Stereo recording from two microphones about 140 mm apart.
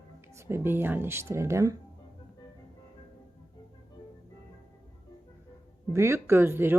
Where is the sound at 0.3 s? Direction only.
15° right (ahead or behind).